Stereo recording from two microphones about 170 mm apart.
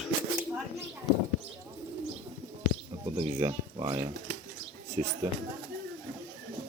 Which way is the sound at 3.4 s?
30° right (ahead or behind).